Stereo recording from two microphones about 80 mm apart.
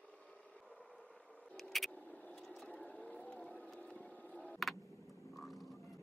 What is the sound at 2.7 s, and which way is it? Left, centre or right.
Vehicle, centre.